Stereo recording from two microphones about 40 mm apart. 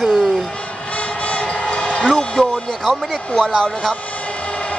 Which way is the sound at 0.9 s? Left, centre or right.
Left.